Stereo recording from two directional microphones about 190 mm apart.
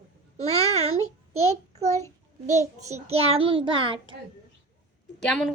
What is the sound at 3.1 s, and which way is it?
Speech, 30° right (ahead or behind).